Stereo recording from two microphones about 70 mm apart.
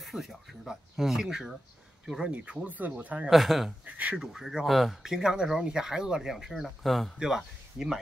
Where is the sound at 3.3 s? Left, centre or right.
Centre.